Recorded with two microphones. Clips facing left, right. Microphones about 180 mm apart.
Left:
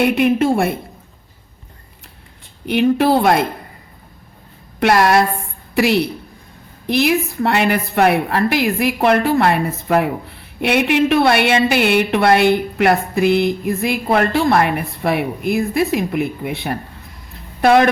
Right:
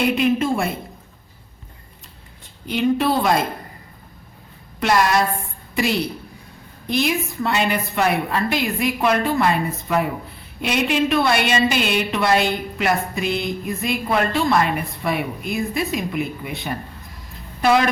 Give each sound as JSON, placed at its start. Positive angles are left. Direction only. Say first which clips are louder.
{"t": 0.0, "sound": "a woman's voice", "louder": "left 4 dB", "side_deg": 60}
{"t": 2.6, "sound": "speech", "louder": "left 5 dB", "side_deg": 70}
{"t": 4.8, "sound": "a woman's voice", "louder": "left 5 dB", "side_deg": 60}